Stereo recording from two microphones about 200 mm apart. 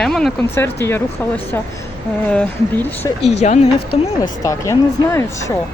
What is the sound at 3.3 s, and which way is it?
Speech, 35° left (ahead or behind).